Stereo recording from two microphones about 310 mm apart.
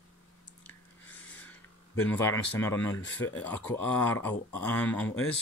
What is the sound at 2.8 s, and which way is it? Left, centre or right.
Speech, left.